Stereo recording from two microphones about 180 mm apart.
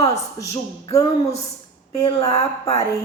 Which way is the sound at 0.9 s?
35° left (ahead or behind).